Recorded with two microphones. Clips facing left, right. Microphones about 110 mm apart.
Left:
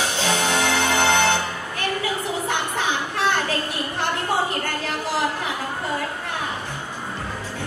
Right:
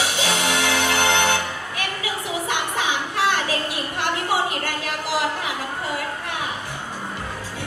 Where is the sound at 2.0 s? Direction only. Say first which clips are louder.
Left 1 dB; 15° right (ahead or behind).